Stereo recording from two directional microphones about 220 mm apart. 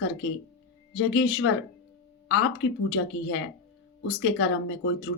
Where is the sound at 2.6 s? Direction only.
60° left (ahead or behind).